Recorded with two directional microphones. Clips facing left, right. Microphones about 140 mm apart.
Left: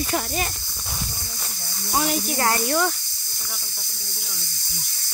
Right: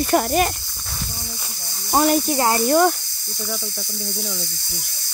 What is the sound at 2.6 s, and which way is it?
Speech, 40° right (ahead or behind).